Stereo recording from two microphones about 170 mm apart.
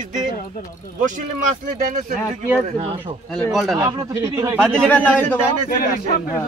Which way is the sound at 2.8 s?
35° right (ahead or behind).